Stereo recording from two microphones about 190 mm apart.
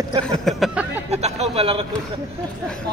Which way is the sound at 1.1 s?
35° right (ahead or behind).